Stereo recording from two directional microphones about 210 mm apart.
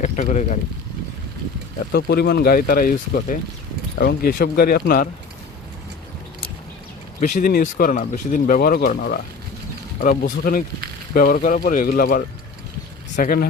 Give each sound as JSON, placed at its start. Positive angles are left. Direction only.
{"t": 0.0, "sound": "speech", "side_deg": 35}
{"t": 1.9, "sound": "speech", "side_deg": 50}
{"t": 7.2, "sound": "speech", "side_deg": 40}